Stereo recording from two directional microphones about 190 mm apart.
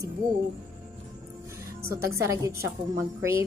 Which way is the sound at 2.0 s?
15° right (ahead or behind).